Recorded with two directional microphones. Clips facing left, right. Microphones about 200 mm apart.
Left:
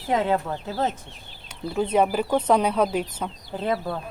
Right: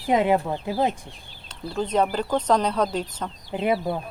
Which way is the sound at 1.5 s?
10° left (ahead or behind).